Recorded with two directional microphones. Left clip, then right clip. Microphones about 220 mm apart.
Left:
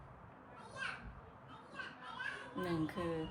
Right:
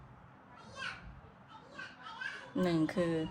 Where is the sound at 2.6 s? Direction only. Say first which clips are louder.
Right 8 dB; 30° right (ahead or behind).